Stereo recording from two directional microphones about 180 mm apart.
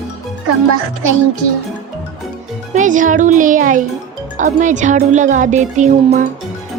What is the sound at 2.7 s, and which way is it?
Speech, 45° right (ahead or behind).